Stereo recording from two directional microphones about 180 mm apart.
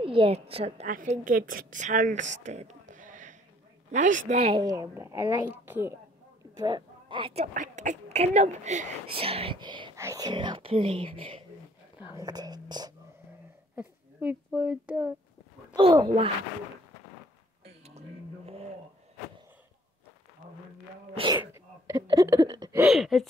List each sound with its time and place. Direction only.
0.0 s a woman's voice: 30° right (ahead or behind)
0.8 s speech: 45° right (ahead or behind)
4.6 s a woman's voice: 20° right (ahead or behind)
6.6 s a woman's voice: 25° right (ahead or behind)
7.5 s speech: 45° right (ahead or behind); by 12.9 s 25° right (ahead or behind)
13.7 s speech: 10° right (ahead or behind)
15.7 s speech: 25° right (ahead or behind)
17.8 s a sound: 35° right (ahead or behind)
21.1 s sneeze: 30° right (ahead or behind)
21.4 s sneeze: 15° right (ahead or behind)
22.0 s speech: 20° right (ahead or behind)
22.8 s speech: centre (ahead or behind)